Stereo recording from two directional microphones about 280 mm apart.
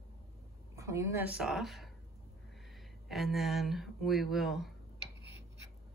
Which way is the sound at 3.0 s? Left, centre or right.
Centre.